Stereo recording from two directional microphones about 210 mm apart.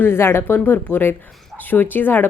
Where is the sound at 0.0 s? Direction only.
10° left (ahead or behind).